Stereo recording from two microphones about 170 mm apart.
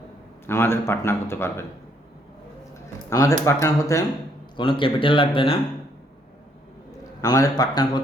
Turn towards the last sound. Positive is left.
turn(degrees=25)  # may be behind; listen again after turning